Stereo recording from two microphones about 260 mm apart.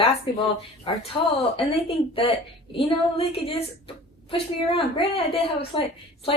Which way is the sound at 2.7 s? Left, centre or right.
Left.